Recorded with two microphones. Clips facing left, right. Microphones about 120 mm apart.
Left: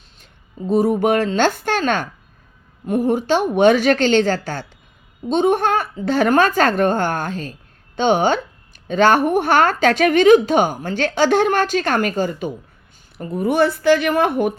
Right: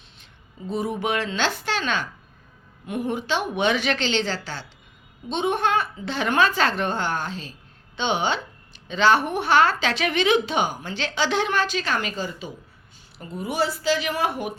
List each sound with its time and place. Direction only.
0.7 s a woman's voice: 45° left (ahead or behind)